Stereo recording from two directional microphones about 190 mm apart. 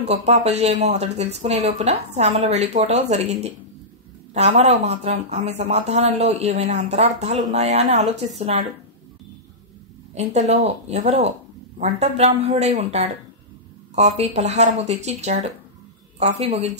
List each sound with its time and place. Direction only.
0.0 s speech: 35° right (ahead or behind)
10.1 s speech: 35° right (ahead or behind)